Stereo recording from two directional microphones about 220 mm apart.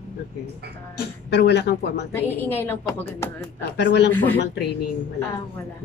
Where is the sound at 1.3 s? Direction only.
50° left (ahead or behind).